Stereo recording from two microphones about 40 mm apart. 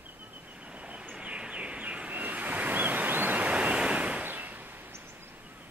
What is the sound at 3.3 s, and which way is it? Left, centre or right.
Waves, right.